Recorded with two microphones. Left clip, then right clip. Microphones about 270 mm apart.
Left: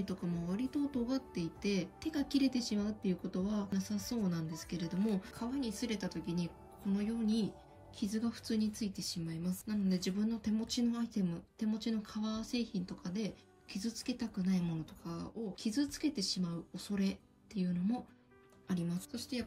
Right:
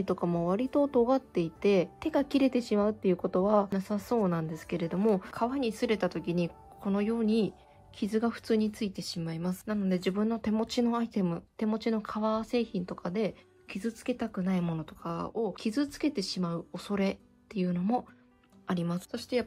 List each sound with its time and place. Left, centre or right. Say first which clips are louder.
0.0 s speech: right 12 dB; centre
7.2 s speech: right 6 dB; centre
8.1 s speech: right 11 dB; centre
8.5 s speech: right 7 dB; centre
9.7 s speech: right 7 dB; centre